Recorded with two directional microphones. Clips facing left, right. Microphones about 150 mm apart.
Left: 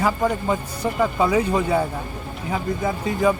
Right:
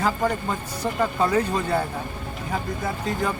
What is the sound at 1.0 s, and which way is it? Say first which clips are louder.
Speech: left 2 dB; 10° left (ahead or behind).